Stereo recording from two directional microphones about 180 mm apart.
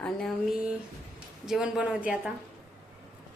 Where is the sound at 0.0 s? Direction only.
Centre (ahead or behind).